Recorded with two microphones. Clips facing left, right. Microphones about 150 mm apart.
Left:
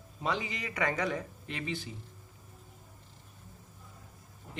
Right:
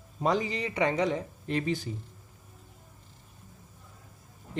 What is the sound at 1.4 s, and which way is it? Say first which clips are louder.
Speech: right 8 dB; 40° right (ahead or behind).